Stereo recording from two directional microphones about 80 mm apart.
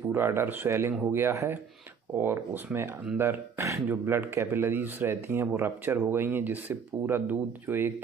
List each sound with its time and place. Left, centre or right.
0.1 s speech: right